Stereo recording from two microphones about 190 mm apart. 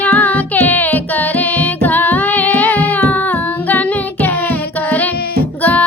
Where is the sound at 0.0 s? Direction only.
10° left (ahead or behind).